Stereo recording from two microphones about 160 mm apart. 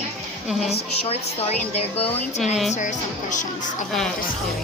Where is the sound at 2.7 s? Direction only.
50° left (ahead or behind).